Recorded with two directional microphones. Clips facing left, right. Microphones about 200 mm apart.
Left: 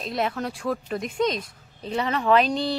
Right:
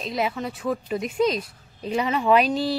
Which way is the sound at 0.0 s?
Centre (ahead or behind).